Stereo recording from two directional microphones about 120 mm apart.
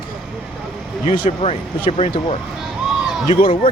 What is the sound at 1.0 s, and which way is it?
Speech, 60° left (ahead or behind).